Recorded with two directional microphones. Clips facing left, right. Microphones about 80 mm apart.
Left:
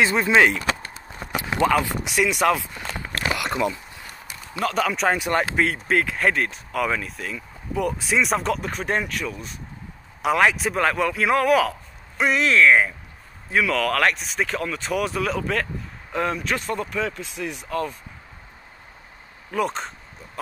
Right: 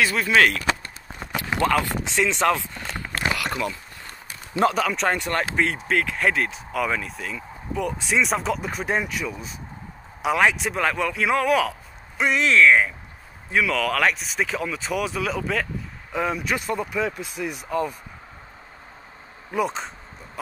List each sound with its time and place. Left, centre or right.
0.0 s speech: left
1.3 s a sound: left
1.7 s speech: centre
3.3 s a sound: centre
4.7 s speech: centre
19.5 s speech: centre